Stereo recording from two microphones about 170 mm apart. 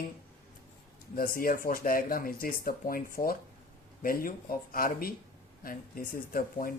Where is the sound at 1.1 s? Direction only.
55° left (ahead or behind).